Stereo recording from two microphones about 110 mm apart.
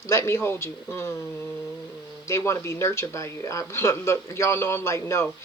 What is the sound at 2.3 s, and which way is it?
Speech, 25° left (ahead or behind).